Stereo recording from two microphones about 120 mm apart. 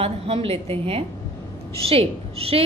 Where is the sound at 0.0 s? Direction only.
55° right (ahead or behind).